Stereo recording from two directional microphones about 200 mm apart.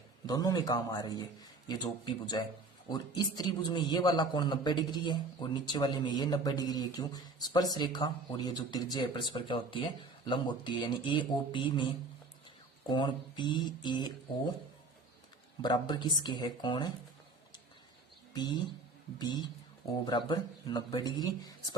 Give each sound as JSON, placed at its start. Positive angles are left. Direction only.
{"t": 0.3, "sound": "a man's voice", "side_deg": 20}
{"t": 12.9, "sound": "a man's voice", "side_deg": 25}
{"t": 15.6, "sound": "a man's voice", "side_deg": 20}
{"t": 18.3, "sound": "a man's voice", "side_deg": 20}